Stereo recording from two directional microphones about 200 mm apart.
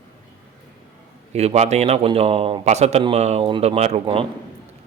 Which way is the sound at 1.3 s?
30° right (ahead or behind).